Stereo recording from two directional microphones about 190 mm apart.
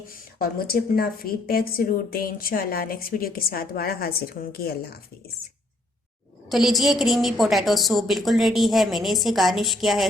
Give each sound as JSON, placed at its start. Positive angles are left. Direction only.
{"t": 0.1, "sound": "a woman's voice", "side_deg": 50}
{"t": 6.5, "sound": "a woman's voice", "side_deg": 0}